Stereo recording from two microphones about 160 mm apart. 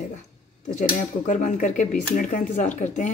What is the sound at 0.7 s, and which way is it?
Speech, 50° left (ahead or behind).